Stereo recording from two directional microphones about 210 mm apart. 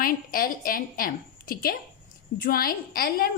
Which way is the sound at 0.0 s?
40° left (ahead or behind).